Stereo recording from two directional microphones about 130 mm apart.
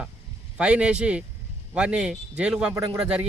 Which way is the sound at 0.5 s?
10° right (ahead or behind).